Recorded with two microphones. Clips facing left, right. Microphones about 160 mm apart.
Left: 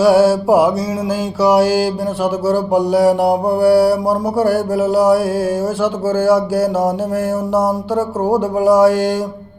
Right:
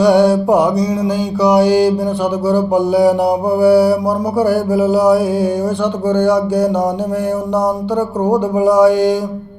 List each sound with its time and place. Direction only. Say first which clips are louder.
0.0 s mantra: even; 5° left (ahead or behind)
8.2 s mantra: right 2 dB; centre (ahead or behind)